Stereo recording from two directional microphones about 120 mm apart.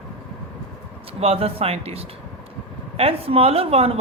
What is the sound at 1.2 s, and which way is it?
A woman's voice, 55° right (ahead or behind).